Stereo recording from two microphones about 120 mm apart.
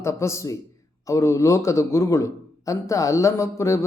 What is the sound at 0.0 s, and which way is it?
A man's voice, 25° left (ahead or behind).